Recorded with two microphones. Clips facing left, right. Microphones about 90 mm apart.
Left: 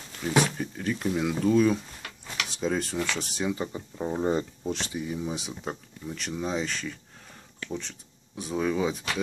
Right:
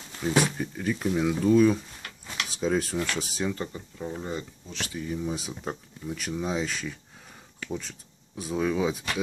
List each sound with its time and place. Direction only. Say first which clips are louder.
0.2 s speech: even; centre (ahead or behind)
3.5 s speech: left 2 dB; 10° left (ahead or behind)
4.0 s speech: left 7 dB; 30° left (ahead or behind)
4.9 s speech: even; 10° left (ahead or behind)